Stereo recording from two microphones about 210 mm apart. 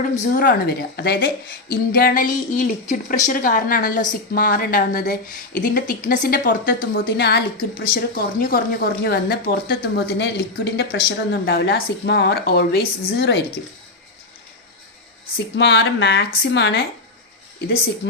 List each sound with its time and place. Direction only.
0.0 s a woman's voice: 40° left (ahead or behind); by 13.4 s 55° left (ahead or behind)
15.5 s a woman's voice: 55° left (ahead or behind)